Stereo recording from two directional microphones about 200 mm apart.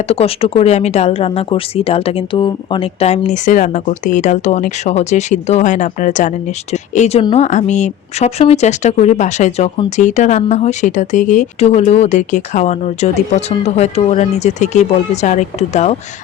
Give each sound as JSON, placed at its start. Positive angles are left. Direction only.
{"t": 0.1, "sound": "speech", "side_deg": 30}